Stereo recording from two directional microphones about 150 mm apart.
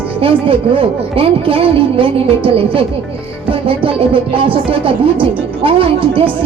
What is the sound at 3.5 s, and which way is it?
Speech, 35° right (ahead or behind).